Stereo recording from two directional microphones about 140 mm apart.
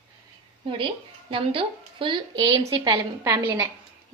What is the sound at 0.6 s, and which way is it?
A woman's voice, 35° right (ahead or behind).